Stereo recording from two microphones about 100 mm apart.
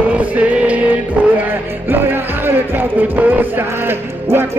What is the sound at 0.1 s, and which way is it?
Music, 15° right (ahead or behind).